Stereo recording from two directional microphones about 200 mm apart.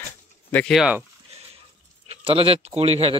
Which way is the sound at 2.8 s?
30° right (ahead or behind).